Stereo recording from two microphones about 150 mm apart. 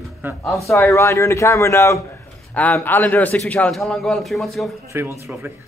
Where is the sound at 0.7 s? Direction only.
20° left (ahead or behind); by 4.8 s centre (ahead or behind).